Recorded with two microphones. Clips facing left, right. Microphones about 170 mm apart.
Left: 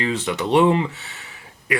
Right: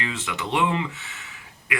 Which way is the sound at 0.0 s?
35° left (ahead or behind).